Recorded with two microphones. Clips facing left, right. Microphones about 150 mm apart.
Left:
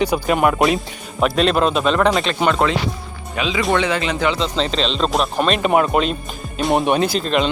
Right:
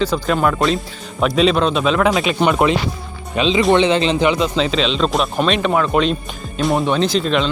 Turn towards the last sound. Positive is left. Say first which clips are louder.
# right 1 dB
turn(degrees=5)  # may be behind; listen again after turning